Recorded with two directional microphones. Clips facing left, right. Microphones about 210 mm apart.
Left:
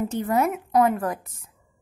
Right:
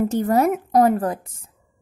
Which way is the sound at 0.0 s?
40° right (ahead or behind).